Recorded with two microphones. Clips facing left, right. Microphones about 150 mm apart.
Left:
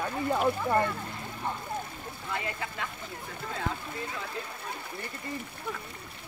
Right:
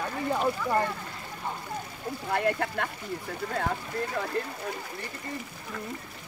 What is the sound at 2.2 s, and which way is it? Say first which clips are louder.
Speech: right 8 dB; 60° right (ahead or behind).